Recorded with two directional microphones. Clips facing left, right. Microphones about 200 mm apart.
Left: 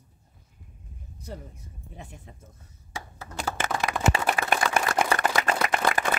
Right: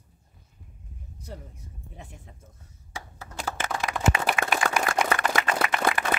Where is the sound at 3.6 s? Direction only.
60° left (ahead or behind).